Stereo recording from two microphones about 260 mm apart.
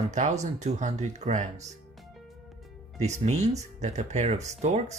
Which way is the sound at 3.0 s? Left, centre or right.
Right.